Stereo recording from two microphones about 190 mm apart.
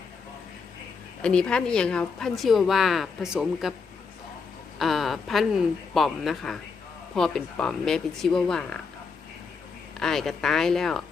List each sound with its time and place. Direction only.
1.2 s a woman's voice: 5° left (ahead or behind)
4.8 s a woman's voice: centre (ahead or behind)
10.0 s a woman's voice: centre (ahead or behind)